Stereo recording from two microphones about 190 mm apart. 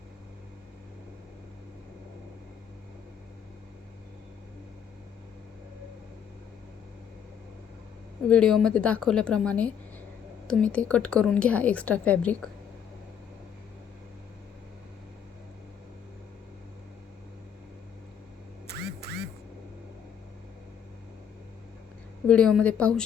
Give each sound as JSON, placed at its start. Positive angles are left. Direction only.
{"t": 8.3, "sound": "a woman's voice", "side_deg": 5}
{"t": 18.8, "sound": "music", "side_deg": -60}
{"t": 22.3, "sound": "a woman's voice", "side_deg": 5}